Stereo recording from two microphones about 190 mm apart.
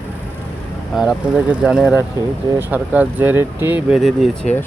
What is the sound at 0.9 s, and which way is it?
Speech, 5° right (ahead or behind).